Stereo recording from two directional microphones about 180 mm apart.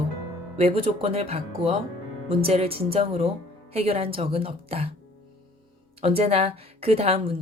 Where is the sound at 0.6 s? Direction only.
30° right (ahead or behind).